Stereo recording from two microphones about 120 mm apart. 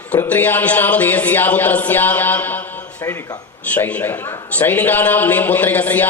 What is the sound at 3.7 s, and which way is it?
A man's voice, 15° left (ahead or behind).